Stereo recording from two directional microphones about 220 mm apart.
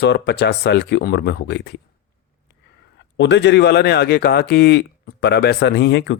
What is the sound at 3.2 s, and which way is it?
Speech, 55° left (ahead or behind).